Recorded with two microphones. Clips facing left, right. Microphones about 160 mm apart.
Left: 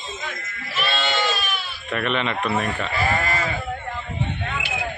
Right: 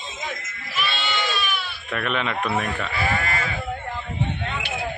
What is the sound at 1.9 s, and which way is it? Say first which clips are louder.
A man's voice: left 2 dB; centre (ahead or behind).